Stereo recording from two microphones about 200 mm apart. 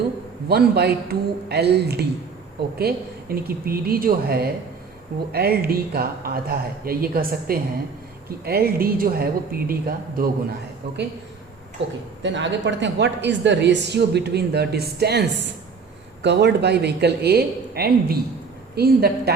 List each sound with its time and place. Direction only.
0.4 s a man's voice: 50° right (ahead or behind)